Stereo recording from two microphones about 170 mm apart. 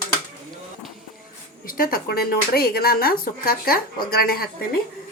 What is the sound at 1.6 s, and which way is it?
Speech, 60° left (ahead or behind).